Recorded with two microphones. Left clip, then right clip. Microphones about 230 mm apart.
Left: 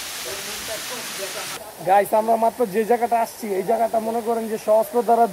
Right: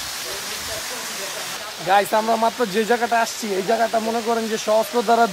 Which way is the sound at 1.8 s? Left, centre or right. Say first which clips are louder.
Even; right.